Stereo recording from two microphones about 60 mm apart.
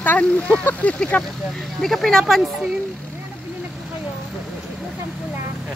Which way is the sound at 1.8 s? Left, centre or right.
Centre.